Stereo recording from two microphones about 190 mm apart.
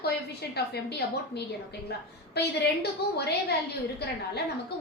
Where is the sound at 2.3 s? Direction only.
60° left (ahead or behind).